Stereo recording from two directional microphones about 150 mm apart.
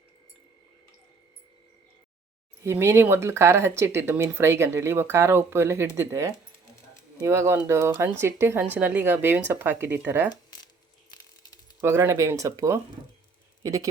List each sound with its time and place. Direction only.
2.6 s speech: 15° right (ahead or behind)
11.8 s speech: 15° right (ahead or behind)